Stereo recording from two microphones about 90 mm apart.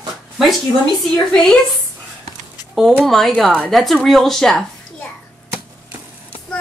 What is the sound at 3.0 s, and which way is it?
Speech, centre (ahead or behind).